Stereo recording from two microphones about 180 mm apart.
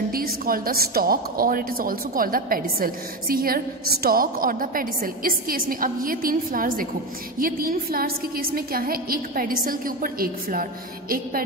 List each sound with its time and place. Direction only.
0.1 s a woman's voice: 55° right (ahead or behind)